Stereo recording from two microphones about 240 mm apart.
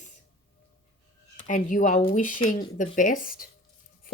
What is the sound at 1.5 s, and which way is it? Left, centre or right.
Speech, left.